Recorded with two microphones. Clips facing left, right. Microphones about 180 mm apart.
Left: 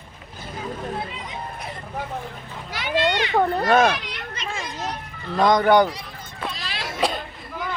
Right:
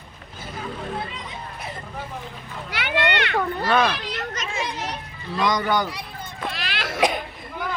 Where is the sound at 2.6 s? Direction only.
65° right (ahead or behind).